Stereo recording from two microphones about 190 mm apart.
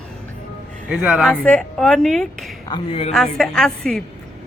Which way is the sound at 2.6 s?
25° left (ahead or behind).